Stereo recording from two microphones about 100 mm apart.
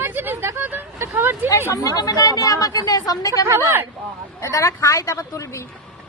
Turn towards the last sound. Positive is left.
turn(degrees=30)  # may be behind; listen again after turning